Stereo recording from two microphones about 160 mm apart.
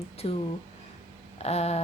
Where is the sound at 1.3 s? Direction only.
40° left (ahead or behind).